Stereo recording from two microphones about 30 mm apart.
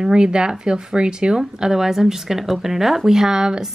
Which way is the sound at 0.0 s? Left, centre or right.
Right.